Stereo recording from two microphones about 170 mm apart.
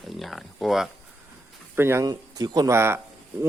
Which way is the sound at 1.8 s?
15° right (ahead or behind).